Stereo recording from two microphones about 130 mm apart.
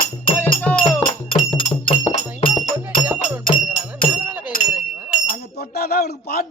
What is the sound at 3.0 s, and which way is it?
Music, 15° right (ahead or behind).